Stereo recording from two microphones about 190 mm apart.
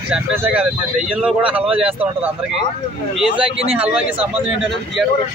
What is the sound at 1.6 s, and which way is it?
Speech, 30° right (ahead or behind).